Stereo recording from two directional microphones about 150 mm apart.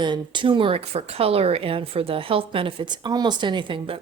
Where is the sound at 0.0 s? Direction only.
30° right (ahead or behind).